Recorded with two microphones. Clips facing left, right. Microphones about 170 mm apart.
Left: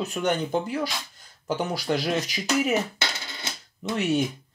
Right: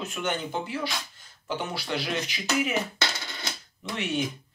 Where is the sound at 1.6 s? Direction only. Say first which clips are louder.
Left 5 dB; 40° left (ahead or behind).